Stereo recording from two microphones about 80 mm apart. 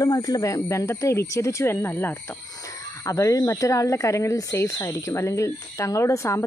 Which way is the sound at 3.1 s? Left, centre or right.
Left.